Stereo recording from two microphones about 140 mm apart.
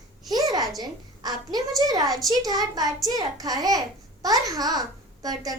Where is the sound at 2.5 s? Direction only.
30° right (ahead or behind).